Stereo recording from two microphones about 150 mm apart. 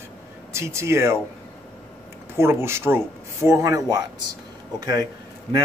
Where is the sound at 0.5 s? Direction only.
15° right (ahead or behind).